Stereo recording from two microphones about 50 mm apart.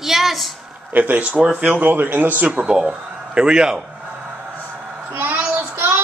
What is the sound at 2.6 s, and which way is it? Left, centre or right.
Speech, centre.